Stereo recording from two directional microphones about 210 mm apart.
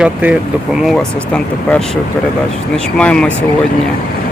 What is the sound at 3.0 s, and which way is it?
Speech, 5° left (ahead or behind).